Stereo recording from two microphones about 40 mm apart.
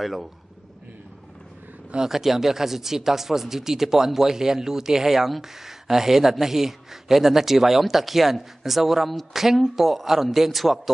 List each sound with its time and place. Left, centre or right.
0.0 s speech: centre
2.0 s speech: centre